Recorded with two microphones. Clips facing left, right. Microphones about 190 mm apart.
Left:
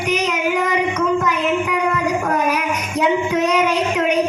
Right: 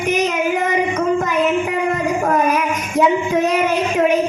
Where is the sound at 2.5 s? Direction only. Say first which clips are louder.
Right 2 dB; 50° right (ahead or behind).